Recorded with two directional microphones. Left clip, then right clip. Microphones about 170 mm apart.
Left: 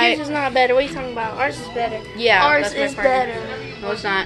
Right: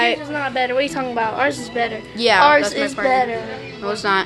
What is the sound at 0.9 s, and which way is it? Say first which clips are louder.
Speech: right 3 dB; 70° right (ahead or behind).